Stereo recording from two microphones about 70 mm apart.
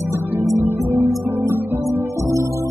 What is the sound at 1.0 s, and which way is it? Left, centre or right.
Music, right.